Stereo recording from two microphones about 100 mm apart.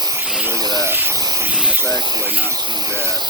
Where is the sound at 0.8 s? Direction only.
20° right (ahead or behind).